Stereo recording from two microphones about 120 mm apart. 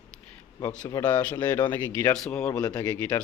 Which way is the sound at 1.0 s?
15° left (ahead or behind).